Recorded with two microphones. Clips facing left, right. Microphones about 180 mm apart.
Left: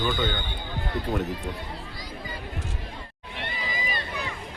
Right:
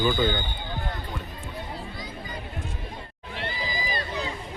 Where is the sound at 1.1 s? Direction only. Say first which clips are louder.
Left 10 dB; 80° left.